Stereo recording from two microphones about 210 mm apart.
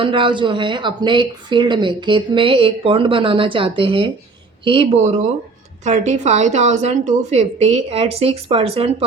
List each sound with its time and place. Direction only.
0.0 s a woman's voice: 25° right (ahead or behind)